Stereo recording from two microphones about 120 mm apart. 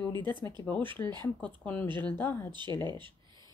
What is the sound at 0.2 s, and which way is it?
Speech, 15° left (ahead or behind).